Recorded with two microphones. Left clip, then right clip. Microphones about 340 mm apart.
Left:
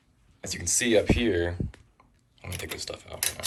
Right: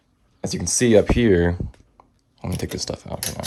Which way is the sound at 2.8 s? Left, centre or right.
Centre.